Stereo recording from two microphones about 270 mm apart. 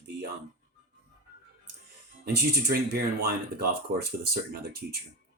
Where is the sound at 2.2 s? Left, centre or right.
Right.